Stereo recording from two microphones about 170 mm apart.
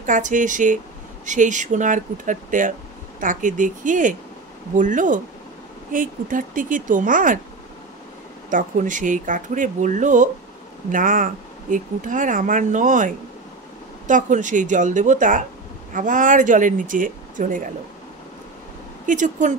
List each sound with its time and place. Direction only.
0.0 s speech: 50° right (ahead or behind)
8.5 s speech: 50° right (ahead or behind)
19.0 s speech: 50° right (ahead or behind)